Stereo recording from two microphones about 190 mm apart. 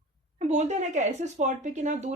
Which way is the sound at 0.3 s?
35° right (ahead or behind).